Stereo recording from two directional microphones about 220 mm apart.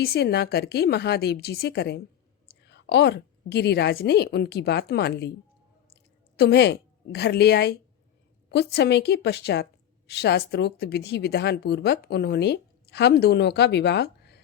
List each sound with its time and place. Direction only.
0.0 s speech: 45° left (ahead or behind)
6.3 s a woman's voice: 50° left (ahead or behind)